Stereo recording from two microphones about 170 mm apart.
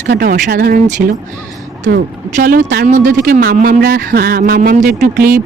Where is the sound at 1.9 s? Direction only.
60° right (ahead or behind).